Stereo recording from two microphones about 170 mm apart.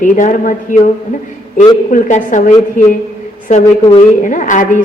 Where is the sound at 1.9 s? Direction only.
45° left (ahead or behind).